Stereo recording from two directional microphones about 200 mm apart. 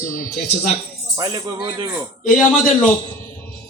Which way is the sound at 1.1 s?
20° right (ahead or behind).